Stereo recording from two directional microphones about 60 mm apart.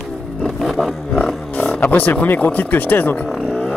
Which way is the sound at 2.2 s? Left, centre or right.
Left.